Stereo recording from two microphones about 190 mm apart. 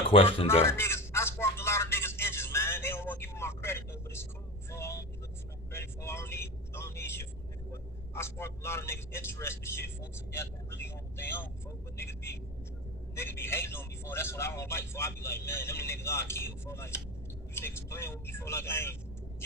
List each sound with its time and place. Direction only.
0.1 s speech: 30° left (ahead or behind)
0.6 s a sound: 15° left (ahead or behind)
4.7 s vehicle: 15° left (ahead or behind)
17.5 s speech: 15° left (ahead or behind)